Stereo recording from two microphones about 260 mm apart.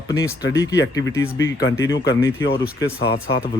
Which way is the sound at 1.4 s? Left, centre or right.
Left.